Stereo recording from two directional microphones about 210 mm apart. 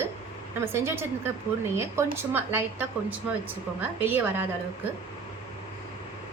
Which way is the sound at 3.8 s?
10° right (ahead or behind).